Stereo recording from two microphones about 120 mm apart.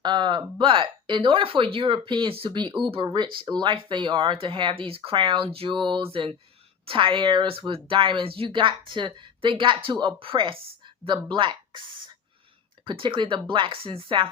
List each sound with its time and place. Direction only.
0.0 s speech: 40° right (ahead or behind)